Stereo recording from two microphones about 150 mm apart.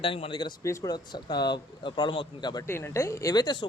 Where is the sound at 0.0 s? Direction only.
35° left (ahead or behind).